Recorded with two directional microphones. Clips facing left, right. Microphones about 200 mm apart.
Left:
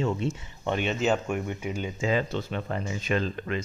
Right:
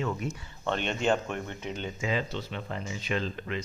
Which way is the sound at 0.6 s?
10° left (ahead or behind).